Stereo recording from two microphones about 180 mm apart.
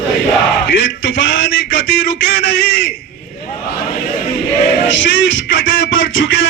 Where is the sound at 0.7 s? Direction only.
90° left.